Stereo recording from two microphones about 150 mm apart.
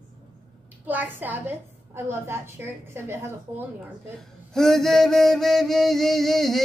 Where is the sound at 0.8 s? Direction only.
10° right (ahead or behind).